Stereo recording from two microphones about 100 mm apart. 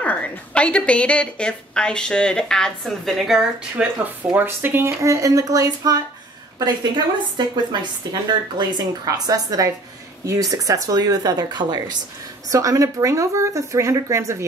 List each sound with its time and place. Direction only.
0.0 s a woman's voice: 15° left (ahead or behind)
3.7 s speech: 15° right (ahead or behind); by 5.9 s 35° right (ahead or behind)
7.3 s a woman's voice: 50° right (ahead or behind)
12.4 s speech: 35° right (ahead or behind)